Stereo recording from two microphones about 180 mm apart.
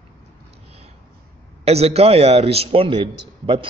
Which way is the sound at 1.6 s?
35° right (ahead or behind).